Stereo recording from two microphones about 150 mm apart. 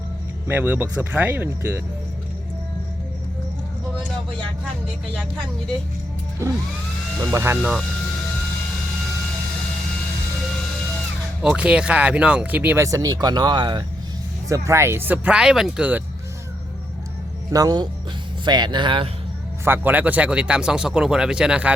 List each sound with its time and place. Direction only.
0.4 s speech: 10° right (ahead or behind)
7.3 s speech: 15° right (ahead or behind)
11.4 s speech: 5° right (ahead or behind); by 13.8 s 30° right (ahead or behind)
14.5 s speech: 20° right (ahead or behind)
17.5 s speech: 25° right (ahead or behind)
19.6 s speech: 15° right (ahead or behind)